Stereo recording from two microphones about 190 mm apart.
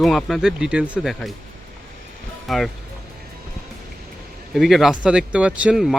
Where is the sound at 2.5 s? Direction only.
Centre (ahead or behind).